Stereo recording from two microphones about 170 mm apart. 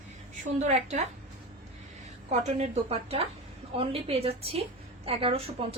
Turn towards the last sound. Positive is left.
turn(degrees=-35)  # may be behind; listen again after turning